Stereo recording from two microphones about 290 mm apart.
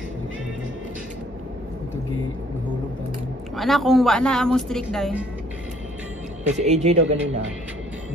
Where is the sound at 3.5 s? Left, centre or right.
Centre.